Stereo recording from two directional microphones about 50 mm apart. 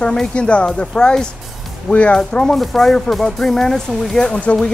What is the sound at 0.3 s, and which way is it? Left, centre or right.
Speech, left.